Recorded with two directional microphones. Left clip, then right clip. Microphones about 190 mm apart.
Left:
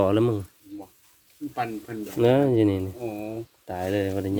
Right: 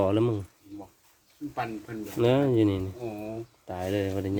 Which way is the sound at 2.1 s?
10° left (ahead or behind).